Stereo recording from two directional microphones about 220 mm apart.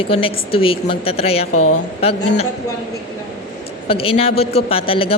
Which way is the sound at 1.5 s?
90° left.